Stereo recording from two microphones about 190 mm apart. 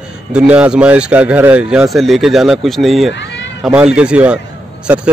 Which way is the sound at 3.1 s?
70° left (ahead or behind).